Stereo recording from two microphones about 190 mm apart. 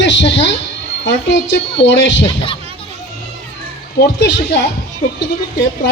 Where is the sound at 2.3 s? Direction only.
25° left (ahead or behind).